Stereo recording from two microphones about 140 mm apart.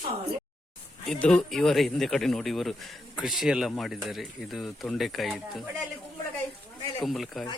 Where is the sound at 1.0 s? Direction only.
5° left (ahead or behind).